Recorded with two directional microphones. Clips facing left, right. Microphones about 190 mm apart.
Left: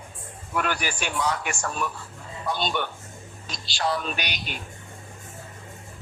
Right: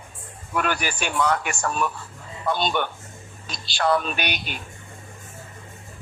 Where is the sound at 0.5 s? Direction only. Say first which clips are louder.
Right 2 dB; 55° right (ahead or behind).